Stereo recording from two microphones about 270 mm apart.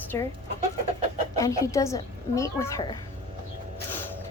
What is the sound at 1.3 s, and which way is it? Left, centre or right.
A woman's voice, centre.